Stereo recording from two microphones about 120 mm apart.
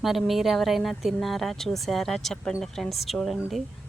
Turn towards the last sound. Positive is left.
turn(degrees=0)  # may be behind; listen again after turning